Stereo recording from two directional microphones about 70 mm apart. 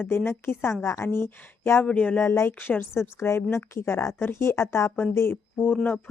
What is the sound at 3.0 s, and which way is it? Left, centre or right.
A woman's voice, left.